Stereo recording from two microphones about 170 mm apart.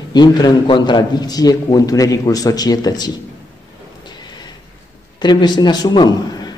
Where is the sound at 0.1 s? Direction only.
25° left (ahead or behind).